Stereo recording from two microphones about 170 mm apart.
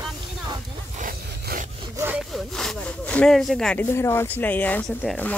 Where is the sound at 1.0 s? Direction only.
55° right (ahead or behind).